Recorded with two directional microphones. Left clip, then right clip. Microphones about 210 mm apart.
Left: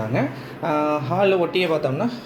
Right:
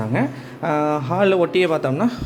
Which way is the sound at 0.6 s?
35° right (ahead or behind).